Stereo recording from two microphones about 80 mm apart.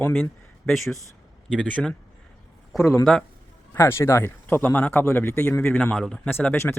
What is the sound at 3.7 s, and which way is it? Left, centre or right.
A man's voice, left.